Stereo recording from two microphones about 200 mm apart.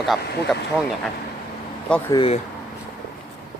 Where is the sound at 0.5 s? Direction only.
Centre (ahead or behind).